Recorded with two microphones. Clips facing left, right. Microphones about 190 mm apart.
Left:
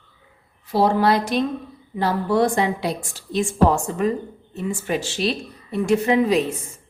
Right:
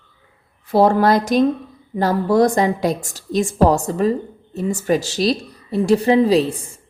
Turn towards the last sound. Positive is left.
turn(degrees=-30)  # may be behind; listen again after turning